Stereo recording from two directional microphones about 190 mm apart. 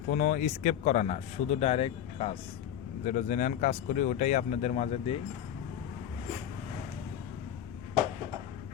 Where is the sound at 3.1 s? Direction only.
40° left (ahead or behind).